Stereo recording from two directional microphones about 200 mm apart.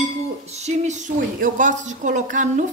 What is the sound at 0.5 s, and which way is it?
A woman's voice, 35° right (ahead or behind).